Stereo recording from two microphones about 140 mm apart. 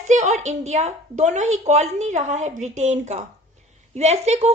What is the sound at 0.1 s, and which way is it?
A woman's voice, 55° right (ahead or behind).